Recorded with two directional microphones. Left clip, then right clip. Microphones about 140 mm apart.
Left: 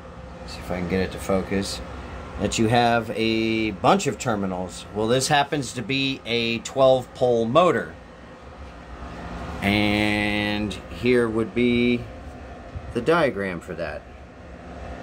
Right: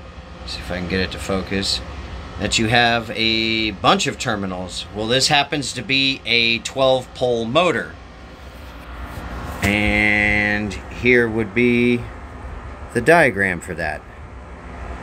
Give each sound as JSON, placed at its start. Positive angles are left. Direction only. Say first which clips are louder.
{"t": 0.5, "sound": "speech", "louder": "right 3 dB", "side_deg": 25}
{"t": 9.7, "sound": "mantra", "louder": "right 5 dB", "side_deg": 35}
{"t": 11.0, "sound": "speech", "louder": "right 5 dB", "side_deg": 5}
{"t": 11.3, "sound": "mantra", "louder": "right 4 dB", "side_deg": -5}
{"t": 12.9, "sound": "speech", "louder": "right 7 dB", "side_deg": -20}